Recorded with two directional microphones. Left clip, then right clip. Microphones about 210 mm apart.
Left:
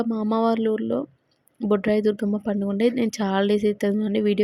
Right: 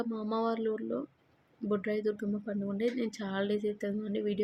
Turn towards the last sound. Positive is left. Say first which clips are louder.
# left 11 dB
turn(degrees=40)  # may be behind; listen again after turning